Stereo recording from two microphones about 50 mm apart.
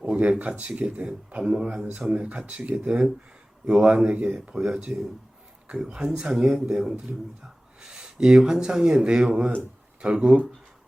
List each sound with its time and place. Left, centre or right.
0.0 s speech: right